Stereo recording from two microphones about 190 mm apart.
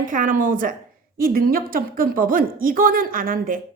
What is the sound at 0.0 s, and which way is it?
Speech, 45° right (ahead or behind).